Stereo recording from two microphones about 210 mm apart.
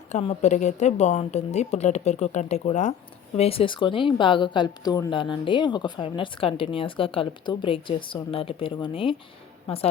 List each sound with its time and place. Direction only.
0.1 s a woman's voice: 35° left (ahead or behind)